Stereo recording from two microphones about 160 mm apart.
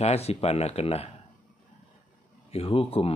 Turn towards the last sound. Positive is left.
turn(degrees=35)  # may be behind; listen again after turning